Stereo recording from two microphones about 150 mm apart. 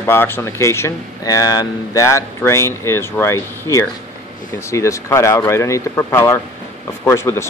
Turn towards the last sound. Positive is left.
turn(degrees=15)  # may be behind; listen again after turning